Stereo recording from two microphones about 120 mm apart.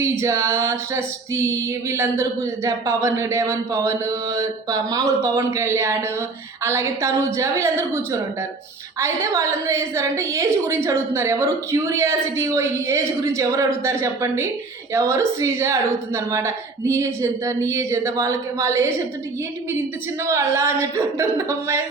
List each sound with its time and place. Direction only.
0.0 s female singing: 25° right (ahead or behind)
20.2 s female singing: 20° right (ahead or behind)